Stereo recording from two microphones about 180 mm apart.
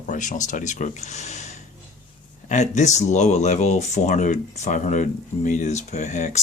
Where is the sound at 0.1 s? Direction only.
45° left (ahead or behind).